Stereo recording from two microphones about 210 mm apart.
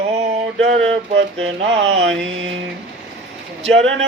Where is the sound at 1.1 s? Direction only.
65° right (ahead or behind).